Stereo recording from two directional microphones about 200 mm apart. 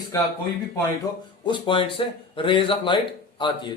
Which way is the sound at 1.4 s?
25° left (ahead or behind).